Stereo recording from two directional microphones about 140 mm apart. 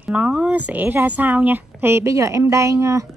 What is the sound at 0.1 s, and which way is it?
A woman's voice, 10° right (ahead or behind).